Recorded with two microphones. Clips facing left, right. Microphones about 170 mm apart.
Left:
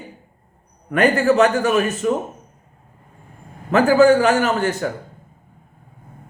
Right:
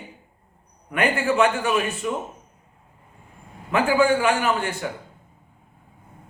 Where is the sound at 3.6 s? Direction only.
40° left (ahead or behind).